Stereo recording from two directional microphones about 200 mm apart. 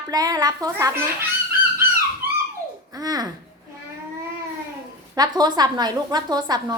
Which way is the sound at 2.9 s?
20° right (ahead or behind).